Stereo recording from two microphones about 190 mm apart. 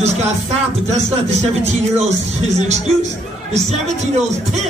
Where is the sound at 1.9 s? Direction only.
35° right (ahead or behind).